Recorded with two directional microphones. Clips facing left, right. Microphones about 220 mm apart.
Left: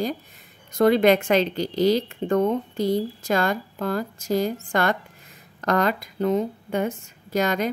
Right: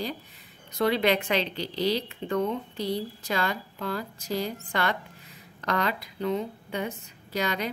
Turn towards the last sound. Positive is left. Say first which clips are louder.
# left 6 dB
turn(degrees=45)  # may be behind; listen again after turning